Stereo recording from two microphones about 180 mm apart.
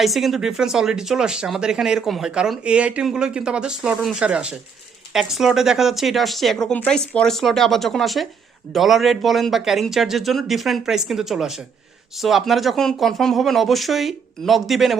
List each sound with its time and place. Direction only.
0.0 s speech: centre (ahead or behind)